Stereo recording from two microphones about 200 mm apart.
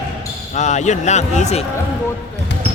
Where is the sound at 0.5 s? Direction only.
35° left (ahead or behind).